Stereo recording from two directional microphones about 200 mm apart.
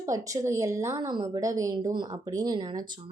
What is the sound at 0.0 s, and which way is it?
Speech, 15° right (ahead or behind).